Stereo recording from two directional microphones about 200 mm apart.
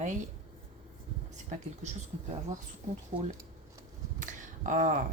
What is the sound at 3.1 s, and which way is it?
Speech, 35° right (ahead or behind).